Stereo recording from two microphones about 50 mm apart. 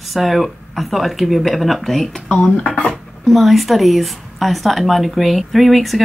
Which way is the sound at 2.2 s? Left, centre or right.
Centre.